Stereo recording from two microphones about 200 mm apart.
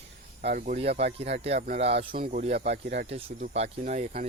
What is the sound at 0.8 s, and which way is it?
Speech, 30° right (ahead or behind).